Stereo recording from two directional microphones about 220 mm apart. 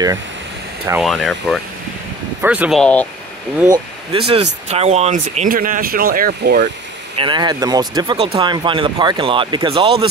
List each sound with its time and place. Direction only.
1.0 s speech: centre (ahead or behind)
3.7 s speech: 25° right (ahead or behind); by 6.7 s 40° right (ahead or behind)
7.2 s speech: 20° right (ahead or behind)